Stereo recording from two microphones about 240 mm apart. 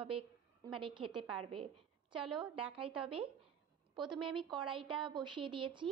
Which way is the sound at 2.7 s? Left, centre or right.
Right.